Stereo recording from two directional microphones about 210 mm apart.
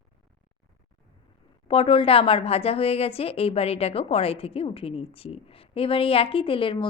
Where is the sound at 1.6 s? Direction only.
25° left (ahead or behind).